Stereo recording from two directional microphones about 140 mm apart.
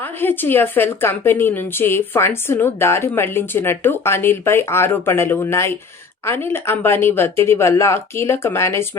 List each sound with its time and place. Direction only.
0.0 s a woman's voice: 15° left (ahead or behind)